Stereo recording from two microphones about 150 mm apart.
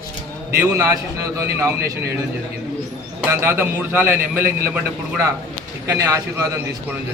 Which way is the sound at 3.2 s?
15° right (ahead or behind).